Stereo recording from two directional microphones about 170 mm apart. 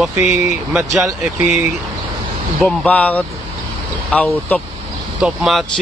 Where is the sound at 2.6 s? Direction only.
5° left (ahead or behind).